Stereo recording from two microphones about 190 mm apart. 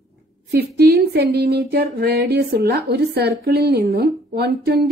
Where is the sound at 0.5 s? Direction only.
60° right (ahead or behind).